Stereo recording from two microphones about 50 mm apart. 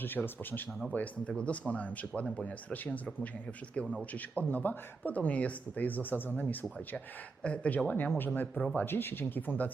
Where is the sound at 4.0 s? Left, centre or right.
Left.